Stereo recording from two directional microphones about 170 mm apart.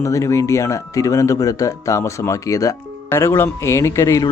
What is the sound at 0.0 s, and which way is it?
Speech, 20° left (ahead or behind).